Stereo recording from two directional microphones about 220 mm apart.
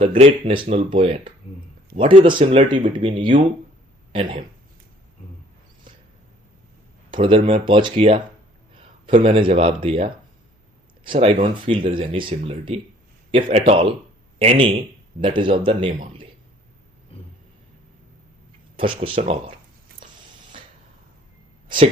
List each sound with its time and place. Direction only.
0.0 s speech: 25° right (ahead or behind)
7.1 s speech: 25° right (ahead or behind)
17.1 s vehicle: 25° left (ahead or behind)
18.8 s speech: 25° right (ahead or behind)